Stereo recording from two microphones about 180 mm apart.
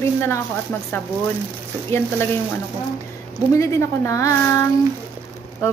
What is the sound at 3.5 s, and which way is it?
A woman's voice, 15° left (ahead or behind).